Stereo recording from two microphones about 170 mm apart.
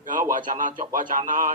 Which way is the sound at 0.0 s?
50° right (ahead or behind).